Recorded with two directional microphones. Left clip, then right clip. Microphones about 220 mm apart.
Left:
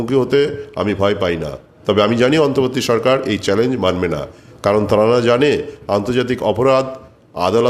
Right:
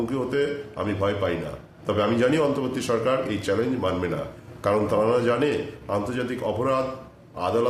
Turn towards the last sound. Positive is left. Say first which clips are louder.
# left 9 dB
turn(degrees=45)  # may be behind; listen again after turning